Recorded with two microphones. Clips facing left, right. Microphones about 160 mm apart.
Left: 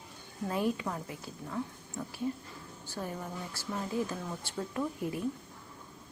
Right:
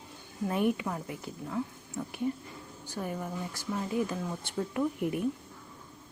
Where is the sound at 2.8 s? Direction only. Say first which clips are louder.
Right 3 dB; 15° right (ahead or behind).